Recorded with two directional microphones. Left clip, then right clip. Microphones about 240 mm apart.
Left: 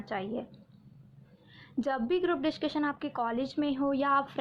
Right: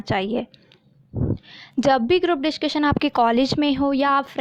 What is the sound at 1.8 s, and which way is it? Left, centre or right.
A woman's voice, right.